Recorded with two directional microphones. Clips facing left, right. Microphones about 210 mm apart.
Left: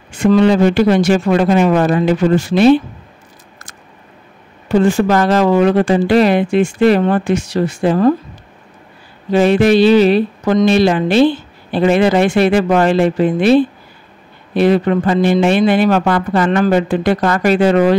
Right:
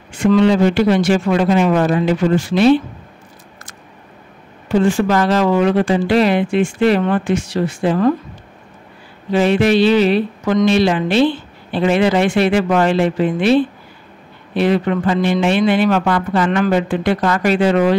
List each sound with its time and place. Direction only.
0.2 s speech: 45° left (ahead or behind)
4.8 s speech: 40° left (ahead or behind)
9.3 s a man's voice: 45° left (ahead or behind)